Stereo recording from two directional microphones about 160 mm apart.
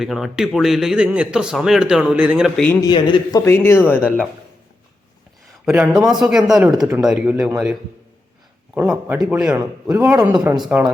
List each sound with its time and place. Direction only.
0.0 s speech: centre (ahead or behind)
2.8 s speech: 25° left (ahead or behind)
3.4 s speech: 15° left (ahead or behind)
5.6 s speech: 5° right (ahead or behind)
8.7 s a man's voice: 10° right (ahead or behind)